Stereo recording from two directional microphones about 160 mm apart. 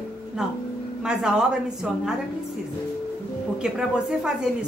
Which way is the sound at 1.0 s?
5° right (ahead or behind).